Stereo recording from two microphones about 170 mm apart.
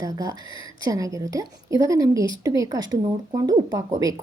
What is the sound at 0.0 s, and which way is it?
Speech, 20° right (ahead or behind).